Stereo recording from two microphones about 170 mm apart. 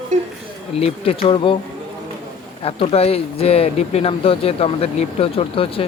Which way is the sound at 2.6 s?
35° left (ahead or behind).